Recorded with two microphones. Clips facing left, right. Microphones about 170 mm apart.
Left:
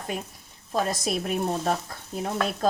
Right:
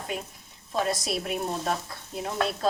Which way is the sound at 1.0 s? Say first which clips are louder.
Left 3 dB; 45° left (ahead or behind).